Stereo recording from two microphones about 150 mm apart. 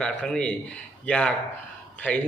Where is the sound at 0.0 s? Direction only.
5° left (ahead or behind).